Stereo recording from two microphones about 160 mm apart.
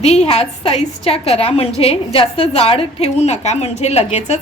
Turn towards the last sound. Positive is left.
turn(degrees=40)  # may be behind; listen again after turning